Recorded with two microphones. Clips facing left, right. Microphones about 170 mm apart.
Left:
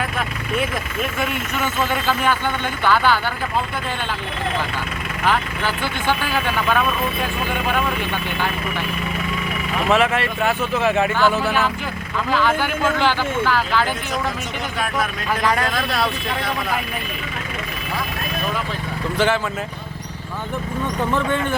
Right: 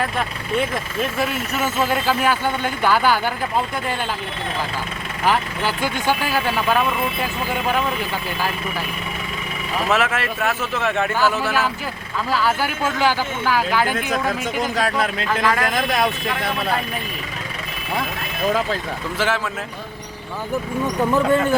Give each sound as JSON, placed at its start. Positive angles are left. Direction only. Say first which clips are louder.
{"t": 1.2, "sound": "speech", "louder": "right 1 dB", "side_deg": -5}
{"t": 5.2, "sound": "speech", "louder": "right 1 dB", "side_deg": -10}
{"t": 9.9, "sound": "speech", "louder": "left 3 dB", "side_deg": 0}
{"t": 14.6, "sound": "speech", "louder": "right 2 dB", "side_deg": -35}
{"t": 15.3, "sound": "a man's voice", "louder": "left 1 dB", "side_deg": 15}
{"t": 15.6, "sound": "speech", "louder": "right 2 dB", "side_deg": -20}
{"t": 19.1, "sound": "speech", "louder": "left 3 dB", "side_deg": -5}
{"t": 20.8, "sound": "speech", "louder": "right 3 dB", "side_deg": -5}
{"t": 21.2, "sound": "speech", "louder": "right 5 dB", "side_deg": -40}